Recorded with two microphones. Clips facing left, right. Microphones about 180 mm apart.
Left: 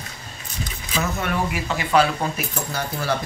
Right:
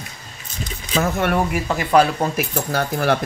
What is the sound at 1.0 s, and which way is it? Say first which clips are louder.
Speech: right 5 dB; 55° right (ahead or behind).